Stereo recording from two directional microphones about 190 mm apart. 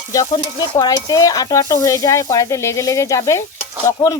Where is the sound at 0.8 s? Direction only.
20° left (ahead or behind).